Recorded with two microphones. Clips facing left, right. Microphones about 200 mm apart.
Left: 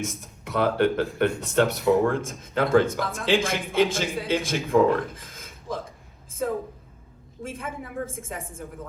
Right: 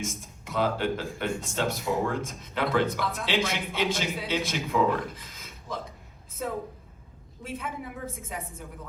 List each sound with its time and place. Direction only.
0.0 s speech: 65° left (ahead or behind)
7.4 s speech: 50° left (ahead or behind)